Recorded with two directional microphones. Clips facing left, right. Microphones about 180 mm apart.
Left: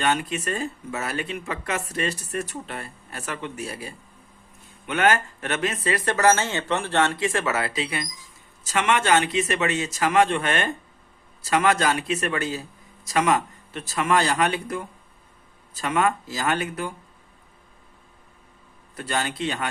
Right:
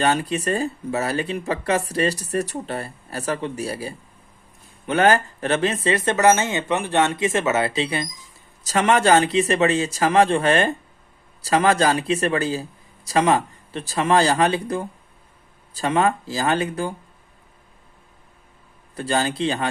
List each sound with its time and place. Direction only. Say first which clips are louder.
0.0 s speech: right 4 dB; 35° right (ahead or behind)
18.9 s speech: right 5 dB; 30° right (ahead or behind)